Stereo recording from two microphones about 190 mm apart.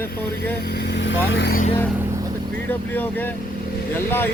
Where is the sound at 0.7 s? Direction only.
60° left (ahead or behind).